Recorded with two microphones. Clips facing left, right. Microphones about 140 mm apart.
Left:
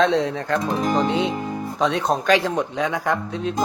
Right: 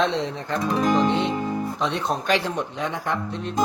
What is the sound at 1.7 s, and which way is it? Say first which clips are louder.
Speech: left 4 dB; 90° left.